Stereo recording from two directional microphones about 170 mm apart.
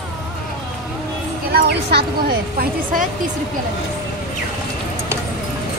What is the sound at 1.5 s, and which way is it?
Speech, 75° right (ahead or behind).